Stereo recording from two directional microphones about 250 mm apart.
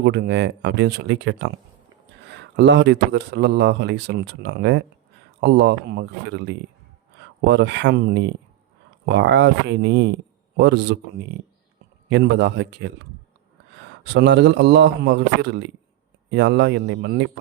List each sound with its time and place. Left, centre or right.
0.0 s speech: right
12.0 s speech: right
14.1 s speech: right